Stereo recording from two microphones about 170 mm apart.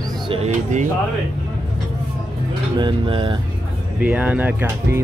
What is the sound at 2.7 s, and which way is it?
Speech, 30° right (ahead or behind).